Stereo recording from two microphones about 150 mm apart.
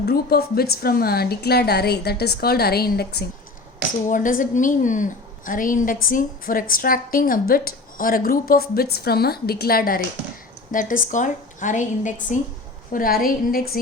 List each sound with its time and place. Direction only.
0.0 s a woman's voice: 90° left
4.1 s a woman's voice: 65° left (ahead or behind)
10.7 s a woman's voice: 60° left (ahead or behind)
12.9 s a woman's voice: 75° left (ahead or behind)